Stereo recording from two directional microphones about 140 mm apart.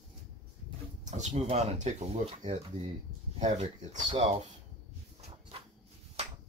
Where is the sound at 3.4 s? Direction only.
60° right (ahead or behind).